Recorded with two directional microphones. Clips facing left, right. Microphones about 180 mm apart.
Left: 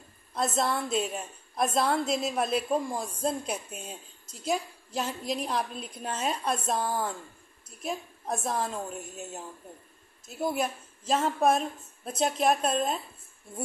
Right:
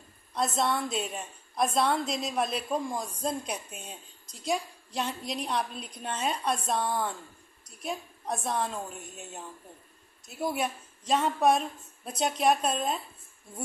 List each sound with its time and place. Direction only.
0.3 s a woman's voice: centre (ahead or behind)